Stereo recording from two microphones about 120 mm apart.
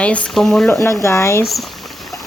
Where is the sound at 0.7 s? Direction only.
25° left (ahead or behind).